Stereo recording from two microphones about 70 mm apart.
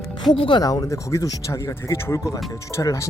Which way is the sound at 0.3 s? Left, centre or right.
Left.